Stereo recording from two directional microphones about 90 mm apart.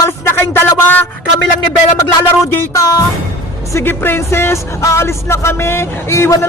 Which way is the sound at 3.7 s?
25° left (ahead or behind).